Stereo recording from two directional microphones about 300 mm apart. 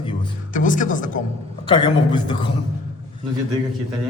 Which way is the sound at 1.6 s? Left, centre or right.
Centre.